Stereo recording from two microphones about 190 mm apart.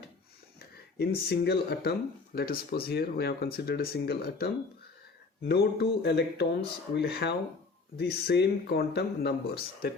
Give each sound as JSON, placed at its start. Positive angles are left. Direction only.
{"t": 0.9, "sound": "speech", "side_deg": 60}